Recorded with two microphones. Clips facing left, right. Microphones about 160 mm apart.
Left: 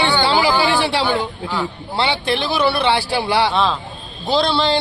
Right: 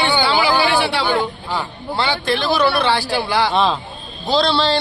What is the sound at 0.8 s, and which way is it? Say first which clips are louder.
A man's voice: even; 35° left (ahead or behind).